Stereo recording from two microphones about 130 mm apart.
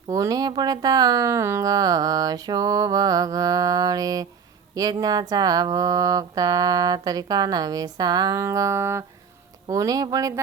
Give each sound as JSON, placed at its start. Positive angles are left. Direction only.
{"t": 0.1, "sound": "speech", "side_deg": -25}